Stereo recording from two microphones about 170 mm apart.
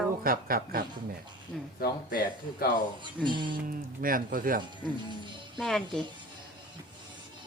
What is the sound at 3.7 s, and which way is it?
Speech, 55° right (ahead or behind).